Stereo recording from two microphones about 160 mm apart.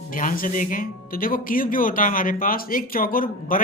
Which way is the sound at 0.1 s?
60° left (ahead or behind).